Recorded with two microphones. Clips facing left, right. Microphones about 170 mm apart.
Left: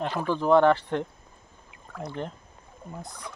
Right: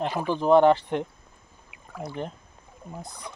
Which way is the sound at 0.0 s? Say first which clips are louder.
Right 1 dB; 15° right (ahead or behind).